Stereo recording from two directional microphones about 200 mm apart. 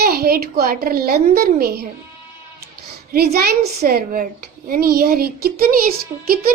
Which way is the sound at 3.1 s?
50° right (ahead or behind).